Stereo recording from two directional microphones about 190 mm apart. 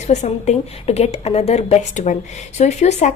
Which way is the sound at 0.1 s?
35° left (ahead or behind).